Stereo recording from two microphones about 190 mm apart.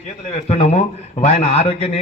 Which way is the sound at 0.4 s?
35° left (ahead or behind).